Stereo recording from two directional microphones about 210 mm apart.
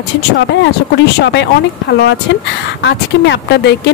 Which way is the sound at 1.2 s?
55° left (ahead or behind).